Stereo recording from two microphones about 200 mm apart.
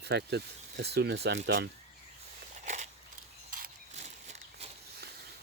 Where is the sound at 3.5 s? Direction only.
45° right (ahead or behind).